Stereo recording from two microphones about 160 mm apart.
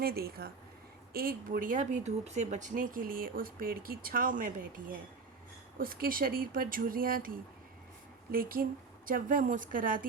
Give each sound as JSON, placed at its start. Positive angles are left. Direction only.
{"t": 0.0, "sound": "speech", "side_deg": -70}